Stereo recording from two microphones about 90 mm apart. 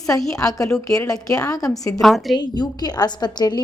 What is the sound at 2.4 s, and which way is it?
A woman's voice, 50° left (ahead or behind).